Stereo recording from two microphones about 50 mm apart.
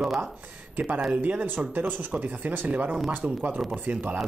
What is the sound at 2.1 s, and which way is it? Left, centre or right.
Speech, right.